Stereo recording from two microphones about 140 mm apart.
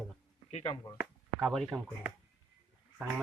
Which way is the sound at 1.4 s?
Centre (ahead or behind).